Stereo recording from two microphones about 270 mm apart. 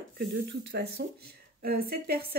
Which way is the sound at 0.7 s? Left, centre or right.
Right.